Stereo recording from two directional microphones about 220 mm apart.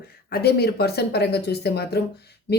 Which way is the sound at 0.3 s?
45° left (ahead or behind).